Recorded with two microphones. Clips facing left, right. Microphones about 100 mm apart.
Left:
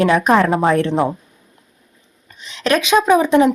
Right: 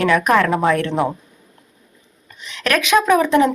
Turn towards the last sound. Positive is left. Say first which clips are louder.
# left 2 dB
turn(degrees=20)  # may be behind; listen again after turning